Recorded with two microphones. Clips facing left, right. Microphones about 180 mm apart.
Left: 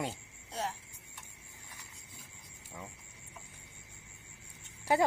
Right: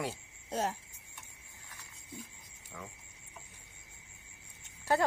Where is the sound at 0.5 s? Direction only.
45° right (ahead or behind).